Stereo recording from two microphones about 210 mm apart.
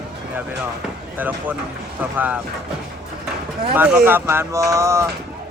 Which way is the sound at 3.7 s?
10° right (ahead or behind).